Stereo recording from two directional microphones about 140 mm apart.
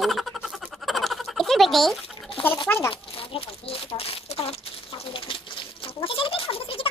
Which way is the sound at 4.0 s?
45° left (ahead or behind).